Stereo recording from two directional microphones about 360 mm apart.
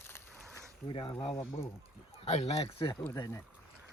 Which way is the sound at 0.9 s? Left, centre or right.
Centre.